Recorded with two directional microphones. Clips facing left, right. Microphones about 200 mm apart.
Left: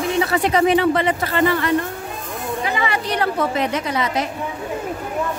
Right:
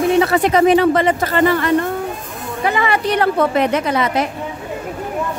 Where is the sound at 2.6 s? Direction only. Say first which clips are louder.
Right 7 dB; 55° right (ahead or behind).